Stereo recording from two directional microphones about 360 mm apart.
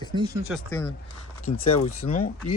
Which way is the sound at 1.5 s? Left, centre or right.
Left.